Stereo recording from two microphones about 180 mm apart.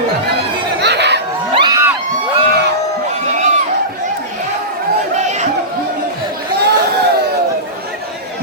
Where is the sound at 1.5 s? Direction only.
25° right (ahead or behind).